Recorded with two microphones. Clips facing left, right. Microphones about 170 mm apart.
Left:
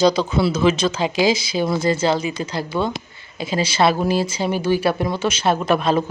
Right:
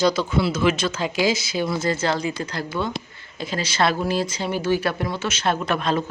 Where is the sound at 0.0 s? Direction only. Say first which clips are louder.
Left 3 dB; 15° left (ahead or behind).